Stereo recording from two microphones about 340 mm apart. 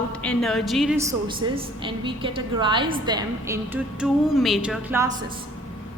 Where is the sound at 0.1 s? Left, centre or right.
Centre.